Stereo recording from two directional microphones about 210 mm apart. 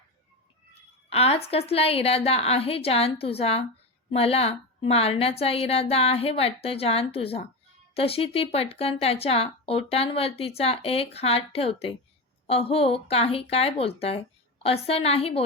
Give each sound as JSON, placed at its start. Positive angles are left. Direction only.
{"t": 0.7, "sound": "speech", "side_deg": 30}